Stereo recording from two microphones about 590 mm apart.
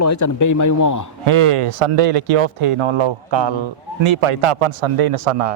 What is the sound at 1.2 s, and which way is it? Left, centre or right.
Speech, right.